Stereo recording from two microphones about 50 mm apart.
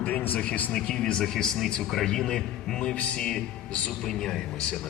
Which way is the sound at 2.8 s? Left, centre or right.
Left.